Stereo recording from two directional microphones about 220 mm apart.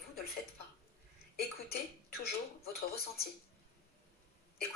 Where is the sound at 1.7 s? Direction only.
45° left (ahead or behind).